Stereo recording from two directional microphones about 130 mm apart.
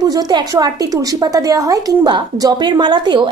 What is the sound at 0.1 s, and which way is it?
A woman's voice, 30° right (ahead or behind).